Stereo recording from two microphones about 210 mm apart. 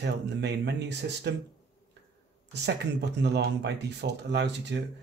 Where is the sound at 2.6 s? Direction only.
55° right (ahead or behind).